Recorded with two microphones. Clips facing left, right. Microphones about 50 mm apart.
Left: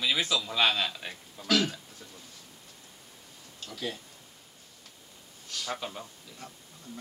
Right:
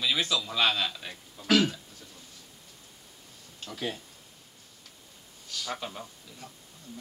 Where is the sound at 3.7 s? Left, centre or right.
Centre.